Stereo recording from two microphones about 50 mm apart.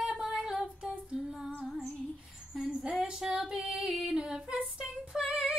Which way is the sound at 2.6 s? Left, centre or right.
Centre.